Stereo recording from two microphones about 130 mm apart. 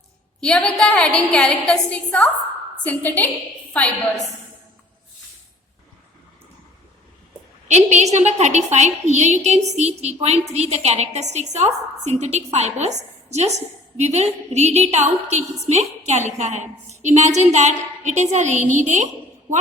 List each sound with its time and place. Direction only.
0.3 s a woman's voice: 5° left (ahead or behind)
7.7 s a woman's voice: 60° right (ahead or behind)